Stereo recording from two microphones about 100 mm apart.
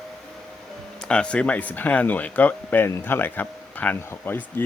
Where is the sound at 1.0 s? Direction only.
10° left (ahead or behind).